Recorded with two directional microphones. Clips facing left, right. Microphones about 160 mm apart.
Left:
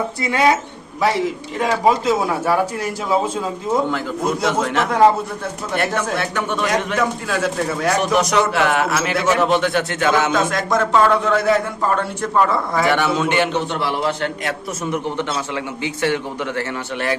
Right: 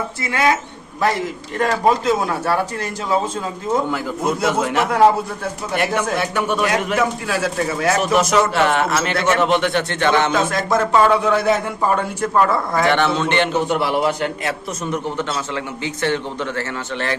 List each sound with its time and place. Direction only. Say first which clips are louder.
0.2 s a man's voice: left 2 dB; 20° left (ahead or behind)
1.5 s a man's voice: even; 5° left (ahead or behind)
3.7 s a man's voice: even; 5° right (ahead or behind)
10.3 s a man's voice: even; 5° right (ahead or behind)
12.3 s a man's voice: even; centre (ahead or behind)
13.5 s a man's voice: right 3 dB; 10° right (ahead or behind)
14.8 s a man's voice: left 1 dB; 15° left (ahead or behind)